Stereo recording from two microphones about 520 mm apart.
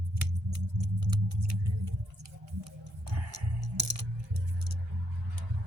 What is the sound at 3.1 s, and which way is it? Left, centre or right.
Music, right.